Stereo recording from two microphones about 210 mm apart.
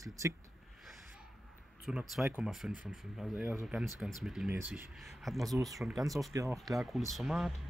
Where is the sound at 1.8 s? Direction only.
Centre (ahead or behind).